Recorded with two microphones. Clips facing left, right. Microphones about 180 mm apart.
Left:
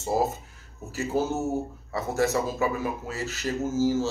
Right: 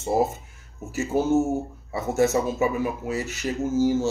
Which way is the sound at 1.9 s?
20° right (ahead or behind).